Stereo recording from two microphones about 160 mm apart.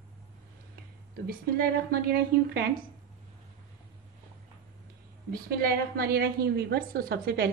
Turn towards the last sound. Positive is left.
turn(degrees=-70)  # may be behind; listen again after turning